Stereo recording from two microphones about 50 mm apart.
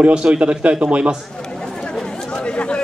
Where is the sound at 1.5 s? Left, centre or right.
Centre.